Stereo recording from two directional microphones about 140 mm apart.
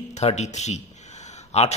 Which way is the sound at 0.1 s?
50° left (ahead or behind).